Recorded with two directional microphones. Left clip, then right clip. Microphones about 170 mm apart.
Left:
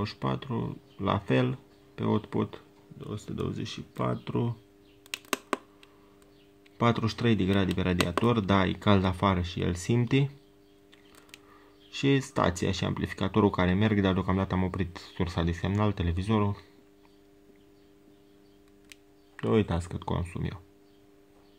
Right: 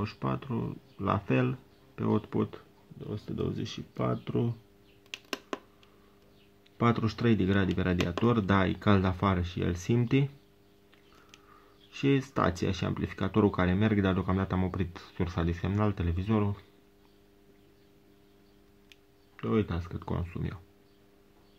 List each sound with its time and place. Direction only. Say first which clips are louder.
0.0 s speech: left 2 dB; 15° left (ahead or behind)
6.8 s speech: left 1 dB; 15° left (ahead or behind)
11.9 s speech: left 2 dB; 15° left (ahead or behind)
19.6 s speech: left 4 dB; 30° left (ahead or behind)